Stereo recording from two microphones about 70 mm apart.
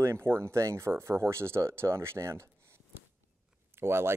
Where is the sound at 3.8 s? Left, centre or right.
Right.